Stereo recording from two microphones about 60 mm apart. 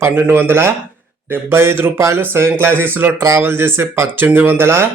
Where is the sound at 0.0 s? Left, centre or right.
Right.